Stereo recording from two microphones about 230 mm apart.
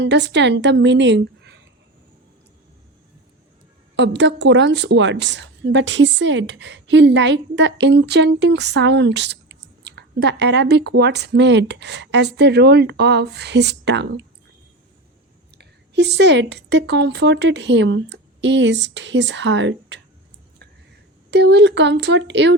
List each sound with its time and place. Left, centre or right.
0.0 s a woman's voice: right
3.9 s a woman's voice: right
15.5 s a woman's voice: right
21.2 s a woman's voice: right